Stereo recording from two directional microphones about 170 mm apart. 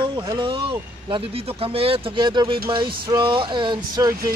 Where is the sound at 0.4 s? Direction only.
30° right (ahead or behind).